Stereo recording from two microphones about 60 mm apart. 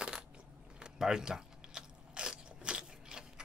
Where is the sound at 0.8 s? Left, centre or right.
Centre.